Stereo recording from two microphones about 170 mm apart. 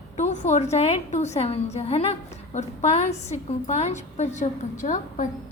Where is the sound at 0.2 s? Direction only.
45° left (ahead or behind).